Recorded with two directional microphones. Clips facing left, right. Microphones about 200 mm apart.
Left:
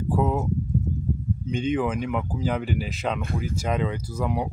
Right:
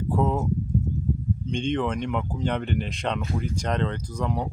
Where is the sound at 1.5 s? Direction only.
5° left (ahead or behind).